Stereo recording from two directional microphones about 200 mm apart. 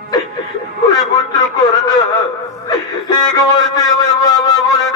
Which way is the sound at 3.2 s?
20° left (ahead or behind).